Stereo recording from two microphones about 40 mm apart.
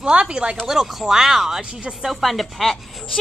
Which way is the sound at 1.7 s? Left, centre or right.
Right.